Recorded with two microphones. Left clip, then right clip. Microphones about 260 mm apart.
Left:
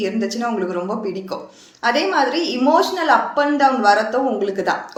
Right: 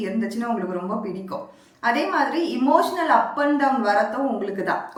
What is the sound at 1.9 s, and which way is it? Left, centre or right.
A woman's voice, centre.